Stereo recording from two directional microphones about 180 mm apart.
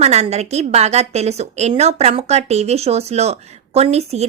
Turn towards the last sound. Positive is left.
turn(degrees=-35)  # may be behind; listen again after turning